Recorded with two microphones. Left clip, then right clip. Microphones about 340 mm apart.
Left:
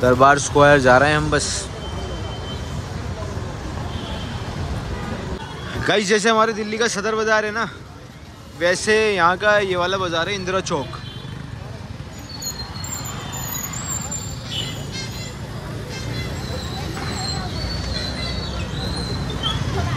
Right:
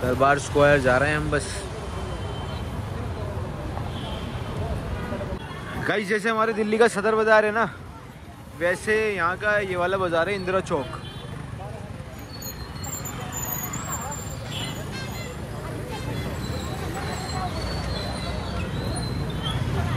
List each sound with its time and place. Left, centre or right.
0.2 s speech: centre
5.9 s speech: centre